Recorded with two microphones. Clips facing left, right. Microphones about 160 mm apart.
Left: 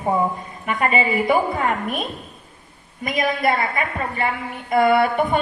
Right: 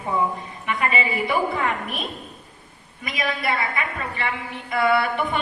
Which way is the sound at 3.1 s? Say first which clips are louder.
Left 6 dB; 45° left (ahead or behind).